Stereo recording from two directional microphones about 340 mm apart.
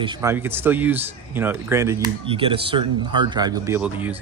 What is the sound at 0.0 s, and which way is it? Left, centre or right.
Speech, centre.